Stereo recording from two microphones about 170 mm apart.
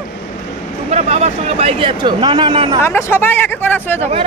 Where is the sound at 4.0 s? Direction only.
35° right (ahead or behind).